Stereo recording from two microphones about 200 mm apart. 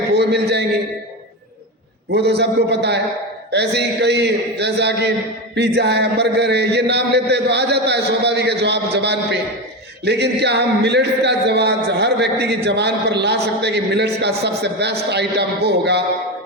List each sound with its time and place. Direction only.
0.2 s a man's voice: 55° right (ahead or behind)
2.0 s a man's voice: 55° right (ahead or behind)